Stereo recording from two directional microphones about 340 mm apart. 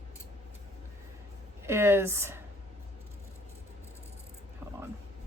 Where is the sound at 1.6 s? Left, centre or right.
Centre.